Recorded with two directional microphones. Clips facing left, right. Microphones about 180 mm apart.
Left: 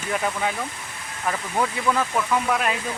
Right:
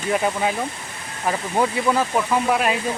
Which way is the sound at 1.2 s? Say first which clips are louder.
Right 4 dB; 25° right (ahead or behind).